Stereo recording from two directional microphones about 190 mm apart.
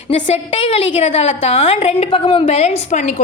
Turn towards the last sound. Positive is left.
turn(degrees=40)  # may be behind; listen again after turning